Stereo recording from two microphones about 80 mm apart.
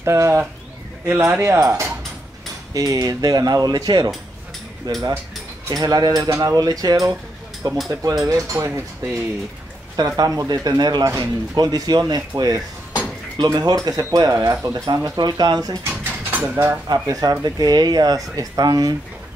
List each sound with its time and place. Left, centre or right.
0.0 s speech: right
2.7 s speech: right
9.9 s speech: right
14.9 s speech: right
16.3 s a sound: right
16.6 s speech: right